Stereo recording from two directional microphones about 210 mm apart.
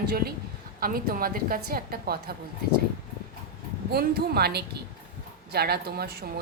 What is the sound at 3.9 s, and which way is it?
A woman's voice, 50° right (ahead or behind).